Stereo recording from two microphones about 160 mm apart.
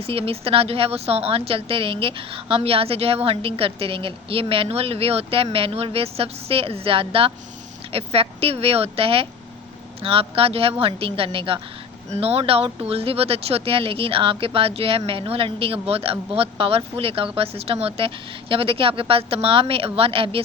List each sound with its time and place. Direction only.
0.0 s speech: 35° right (ahead or behind)